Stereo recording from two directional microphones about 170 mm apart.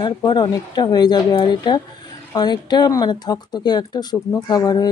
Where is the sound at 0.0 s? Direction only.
25° left (ahead or behind).